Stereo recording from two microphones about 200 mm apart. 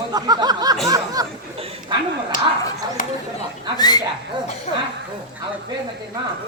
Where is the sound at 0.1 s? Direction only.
20° right (ahead or behind).